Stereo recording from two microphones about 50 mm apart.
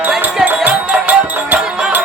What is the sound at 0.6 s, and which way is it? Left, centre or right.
Music, right.